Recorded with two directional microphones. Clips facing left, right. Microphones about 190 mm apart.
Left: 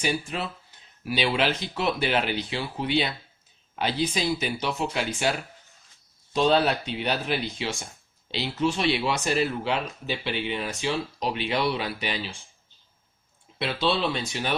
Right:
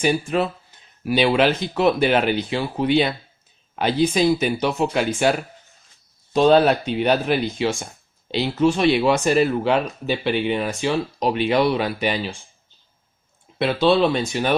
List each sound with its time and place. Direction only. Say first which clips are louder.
0.0 s speech: right 9 dB; 50° right (ahead or behind)
13.6 s speech: right 9 dB; 50° right (ahead or behind)